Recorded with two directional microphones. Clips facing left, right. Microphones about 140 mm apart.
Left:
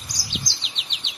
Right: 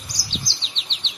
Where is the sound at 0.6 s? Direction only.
10° left (ahead or behind).